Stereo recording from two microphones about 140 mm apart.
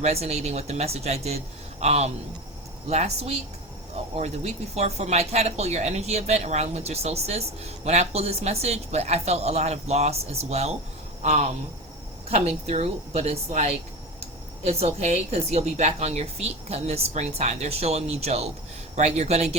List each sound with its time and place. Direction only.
0.0 s a woman's voice: 50° right (ahead or behind)